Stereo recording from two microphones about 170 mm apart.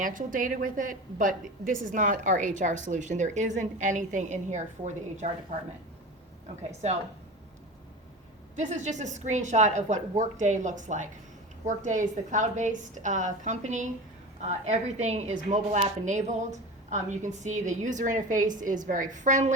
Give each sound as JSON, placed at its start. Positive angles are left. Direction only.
{"t": 0.0, "sound": "a woman's voice", "side_deg": -50}
{"t": 8.5, "sound": "a woman's voice", "side_deg": -45}